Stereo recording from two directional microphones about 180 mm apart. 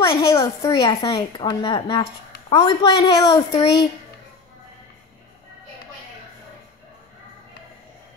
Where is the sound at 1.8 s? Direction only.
15° left (ahead or behind).